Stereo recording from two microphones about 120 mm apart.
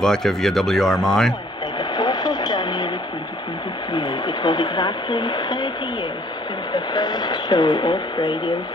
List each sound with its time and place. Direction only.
0.0 s speech: 5° left (ahead or behind)
1.8 s radio: 35° left (ahead or behind)
3.9 s speech: 40° left (ahead or behind)
6.7 s speech: 35° left (ahead or behind)